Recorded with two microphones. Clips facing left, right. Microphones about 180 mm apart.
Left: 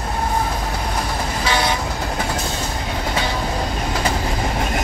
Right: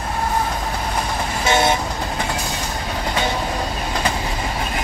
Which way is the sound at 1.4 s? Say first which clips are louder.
Right 4 dB; 25° right (ahead or behind).